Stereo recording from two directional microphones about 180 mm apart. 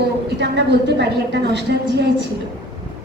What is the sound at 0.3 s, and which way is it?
A woman's voice, 75° right (ahead or behind).